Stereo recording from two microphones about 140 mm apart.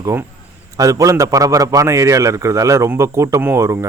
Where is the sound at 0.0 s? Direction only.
20° right (ahead or behind).